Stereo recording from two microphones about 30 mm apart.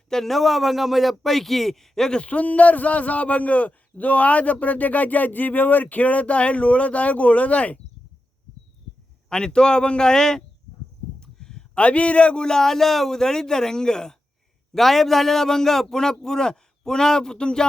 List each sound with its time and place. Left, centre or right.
0.1 s a man's voice: centre
1.2 s a man's voice: centre
2.2 s a man's voice: left
9.3 s speech: left
10.1 s speech: left
11.2 s a sound: left
11.8 s a man's voice: left
12.5 s a man's voice: centre
14.7 s a man's voice: centre
17.3 s speech: left